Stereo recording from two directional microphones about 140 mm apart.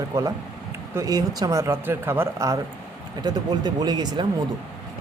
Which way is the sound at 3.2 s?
30° right (ahead or behind).